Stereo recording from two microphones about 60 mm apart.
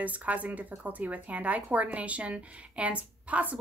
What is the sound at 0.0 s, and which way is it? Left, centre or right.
Speech, right.